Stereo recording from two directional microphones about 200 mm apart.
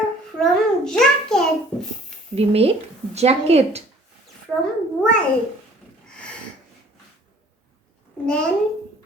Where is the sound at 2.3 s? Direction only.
30° right (ahead or behind).